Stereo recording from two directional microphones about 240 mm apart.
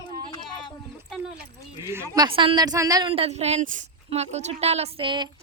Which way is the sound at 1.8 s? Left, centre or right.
Centre.